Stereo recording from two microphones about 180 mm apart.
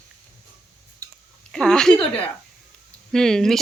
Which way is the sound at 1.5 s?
5° left (ahead or behind).